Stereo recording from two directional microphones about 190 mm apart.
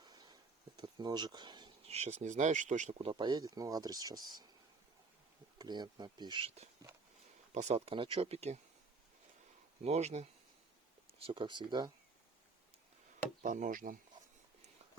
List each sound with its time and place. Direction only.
0.0 s a sound: 20° right (ahead or behind)
0.8 s speech: 20° right (ahead or behind)
5.5 s speech: 20° right (ahead or behind)
9.8 s speech: 35° right (ahead or behind)
13.4 s speech: 40° right (ahead or behind)